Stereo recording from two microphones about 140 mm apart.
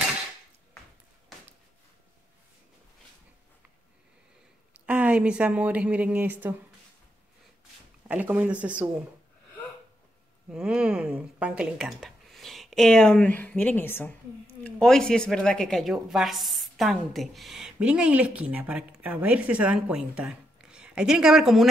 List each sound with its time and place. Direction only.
4.8 s speech: 10° right (ahead or behind)
8.1 s speech: 10° right (ahead or behind)
10.5 s speech: 5° right (ahead or behind); by 14.1 s 15° left (ahead or behind)
14.6 s speech: 5° left (ahead or behind)